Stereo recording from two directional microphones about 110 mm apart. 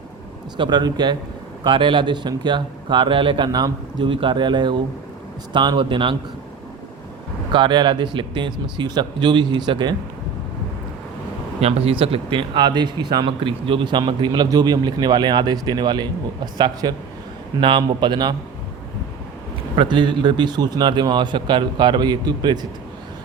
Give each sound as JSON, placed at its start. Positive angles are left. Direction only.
{"t": 0.5, "sound": "a man's voice", "side_deg": -40}
{"t": 7.5, "sound": "a man's voice", "side_deg": -45}
{"t": 11.6, "sound": "a man's voice", "side_deg": -60}
{"t": 19.7, "sound": "a man's voice", "side_deg": -50}